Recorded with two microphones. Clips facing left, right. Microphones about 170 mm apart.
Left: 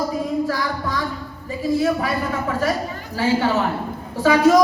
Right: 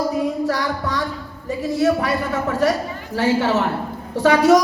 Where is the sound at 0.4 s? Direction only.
75° right (ahead or behind).